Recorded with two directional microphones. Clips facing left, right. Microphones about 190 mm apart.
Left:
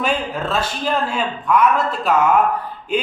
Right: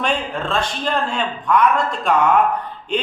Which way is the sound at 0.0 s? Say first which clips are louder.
Left 1 dB; 5° left (ahead or behind).